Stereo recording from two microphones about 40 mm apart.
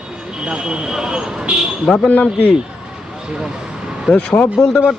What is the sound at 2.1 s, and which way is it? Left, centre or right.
Speech, left.